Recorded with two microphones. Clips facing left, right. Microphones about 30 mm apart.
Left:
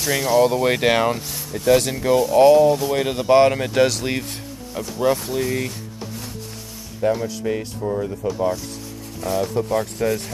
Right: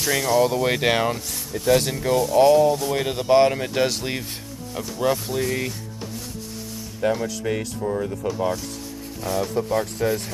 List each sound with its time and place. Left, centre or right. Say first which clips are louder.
0.1 s speech: left 3 dB; centre
7.0 s speech: left 2 dB; right
7.4 s speech: left 2 dB; centre
7.8 s speech: left 2 dB; centre